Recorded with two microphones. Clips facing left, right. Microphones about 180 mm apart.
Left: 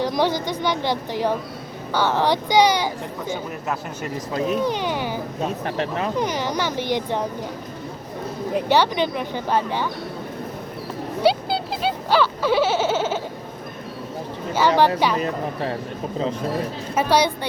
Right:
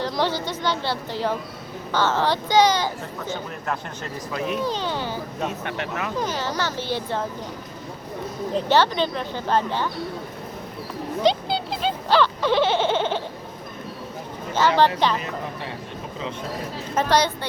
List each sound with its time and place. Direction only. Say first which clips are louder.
0.0 s speech: left 3 dB; 15° left (ahead or behind)
4.3 s speech: left 4 dB; 30° left (ahead or behind)
4.6 s speech: left 3 dB; 15° left (ahead or behind)
5.5 s speech: left 4 dB; 35° left (ahead or behind)
6.1 s speech: left 1 dB; 15° left (ahead or behind)
8.5 s speech: left 1 dB; 15° left (ahead or behind)
11.2 s a sound: left 2 dB; 5° left (ahead or behind)
14.6 s speech: left 1 dB; 10° left (ahead or behind)
16.9 s speech: left 1 dB; 10° left (ahead or behind)